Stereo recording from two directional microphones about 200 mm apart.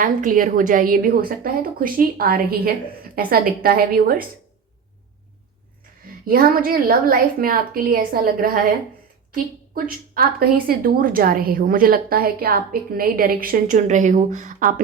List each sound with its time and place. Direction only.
0.0 s a woman's voice: 40° right (ahead or behind)
6.2 s a woman's voice: 45° right (ahead or behind)
10.2 s a woman's voice: 50° right (ahead or behind)